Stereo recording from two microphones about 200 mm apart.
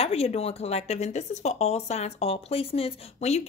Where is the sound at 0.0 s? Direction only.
30° left (ahead or behind).